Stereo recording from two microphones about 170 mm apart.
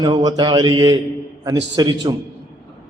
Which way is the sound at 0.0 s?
25° right (ahead or behind).